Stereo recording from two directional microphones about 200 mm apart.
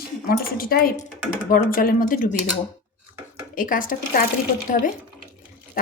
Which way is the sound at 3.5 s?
40° left (ahead or behind).